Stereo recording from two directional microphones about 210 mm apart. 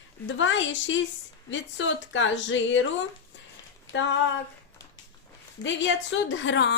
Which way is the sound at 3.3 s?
60° left (ahead or behind).